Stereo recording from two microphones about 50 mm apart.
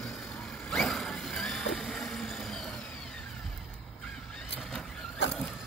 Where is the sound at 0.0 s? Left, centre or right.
Centre.